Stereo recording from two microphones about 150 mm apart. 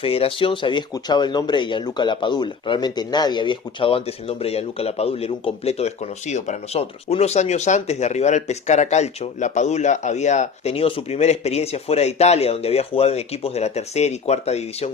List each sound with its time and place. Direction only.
0.0 s speech: 40° left (ahead or behind)